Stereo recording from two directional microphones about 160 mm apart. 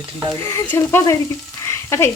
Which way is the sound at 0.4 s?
15° left (ahead or behind).